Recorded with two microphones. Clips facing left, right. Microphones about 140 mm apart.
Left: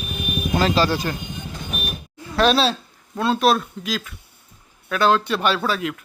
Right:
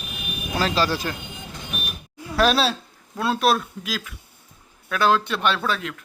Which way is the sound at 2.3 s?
5° right (ahead or behind).